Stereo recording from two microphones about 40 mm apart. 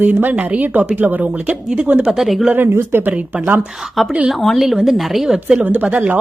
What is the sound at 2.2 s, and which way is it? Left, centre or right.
Speech, centre.